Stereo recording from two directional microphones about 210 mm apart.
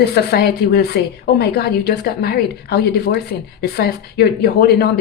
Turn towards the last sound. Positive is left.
turn(degrees=50)  # may be behind; listen again after turning